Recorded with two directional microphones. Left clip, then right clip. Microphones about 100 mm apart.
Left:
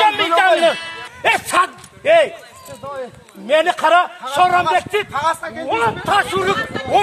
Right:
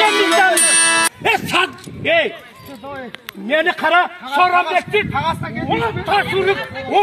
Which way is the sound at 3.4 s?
45° left (ahead or behind).